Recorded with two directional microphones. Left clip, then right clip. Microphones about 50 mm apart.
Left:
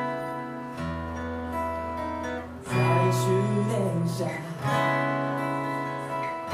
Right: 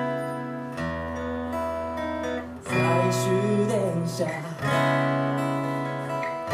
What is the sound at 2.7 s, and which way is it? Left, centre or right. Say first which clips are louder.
Music: right 2 dB; right.